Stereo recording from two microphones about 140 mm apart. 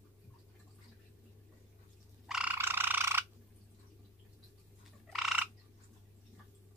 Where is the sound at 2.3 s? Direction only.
10° right (ahead or behind).